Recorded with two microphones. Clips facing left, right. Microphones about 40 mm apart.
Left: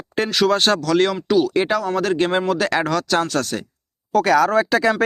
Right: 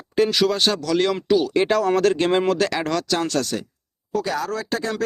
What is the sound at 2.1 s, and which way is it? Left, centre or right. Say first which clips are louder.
Speech: even; centre.